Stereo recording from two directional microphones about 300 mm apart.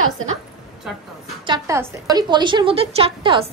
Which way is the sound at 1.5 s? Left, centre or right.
Centre.